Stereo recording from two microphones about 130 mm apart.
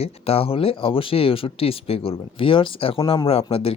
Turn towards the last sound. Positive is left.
turn(degrees=45)  # may be behind; listen again after turning